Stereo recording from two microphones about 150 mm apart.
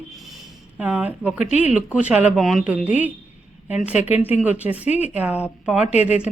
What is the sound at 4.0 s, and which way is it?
Speech, 45° left (ahead or behind).